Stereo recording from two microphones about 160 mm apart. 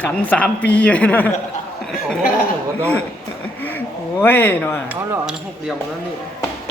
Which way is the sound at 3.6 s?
10° left (ahead or behind).